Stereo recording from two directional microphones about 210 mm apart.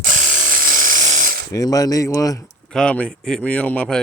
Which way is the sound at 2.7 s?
5° left (ahead or behind).